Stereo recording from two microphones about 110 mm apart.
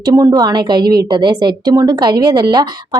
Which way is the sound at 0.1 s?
35° right (ahead or behind).